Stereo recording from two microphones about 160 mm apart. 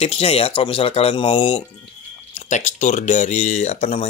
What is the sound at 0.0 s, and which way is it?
Speech, 40° left (ahead or behind).